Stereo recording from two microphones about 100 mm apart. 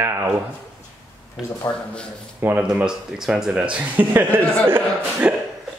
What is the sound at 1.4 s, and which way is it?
Speech, 5° right (ahead or behind).